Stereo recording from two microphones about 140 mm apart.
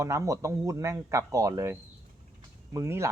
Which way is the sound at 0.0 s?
20° right (ahead or behind).